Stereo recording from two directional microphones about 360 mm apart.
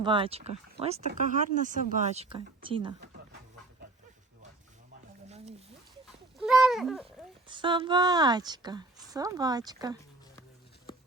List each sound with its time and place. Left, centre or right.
0.0 s speech: centre
6.4 s a sound: centre
7.4 s speech: centre